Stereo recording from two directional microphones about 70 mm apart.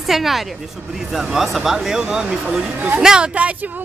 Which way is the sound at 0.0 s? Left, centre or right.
Centre.